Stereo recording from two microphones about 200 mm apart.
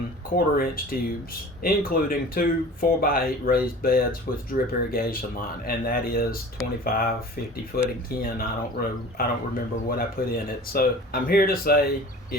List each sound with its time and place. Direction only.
0.3 s speech: 45° left (ahead or behind)